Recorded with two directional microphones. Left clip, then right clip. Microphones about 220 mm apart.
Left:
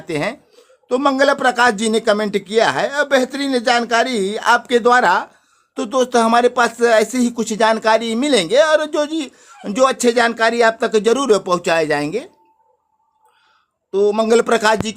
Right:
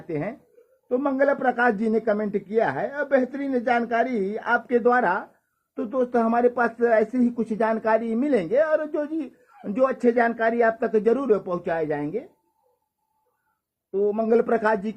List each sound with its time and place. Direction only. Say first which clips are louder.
0.1 s speech: left 8 dB; 30° left (ahead or behind)
13.9 s speech: left 7 dB; 30° left (ahead or behind)